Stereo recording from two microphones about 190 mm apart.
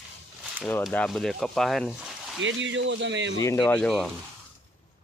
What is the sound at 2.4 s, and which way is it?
Speech, 75° right (ahead or behind).